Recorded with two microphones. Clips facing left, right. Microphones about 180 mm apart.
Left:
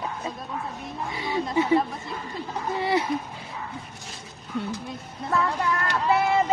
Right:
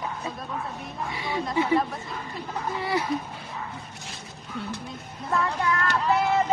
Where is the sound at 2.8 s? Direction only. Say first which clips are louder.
Left 4 dB; 25° left (ahead or behind).